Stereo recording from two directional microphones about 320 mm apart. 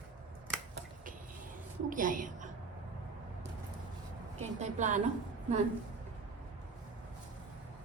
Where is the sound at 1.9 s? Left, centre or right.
Right.